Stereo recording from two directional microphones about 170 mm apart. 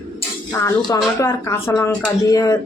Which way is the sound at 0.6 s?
15° left (ahead or behind).